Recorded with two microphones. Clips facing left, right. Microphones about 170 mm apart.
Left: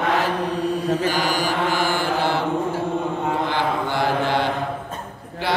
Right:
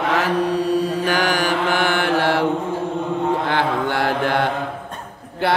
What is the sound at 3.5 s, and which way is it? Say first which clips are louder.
Mantra: right 2 dB; 60° right (ahead or behind).